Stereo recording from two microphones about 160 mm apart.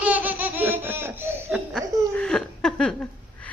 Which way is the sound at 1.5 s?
5° left (ahead or behind).